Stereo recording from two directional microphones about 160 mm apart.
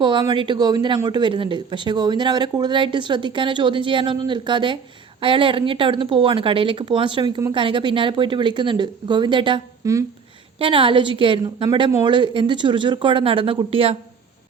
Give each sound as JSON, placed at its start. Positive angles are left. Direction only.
{"t": 0.0, "sound": "speech", "side_deg": -30}